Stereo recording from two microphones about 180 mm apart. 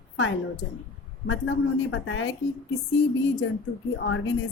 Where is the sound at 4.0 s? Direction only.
90° left.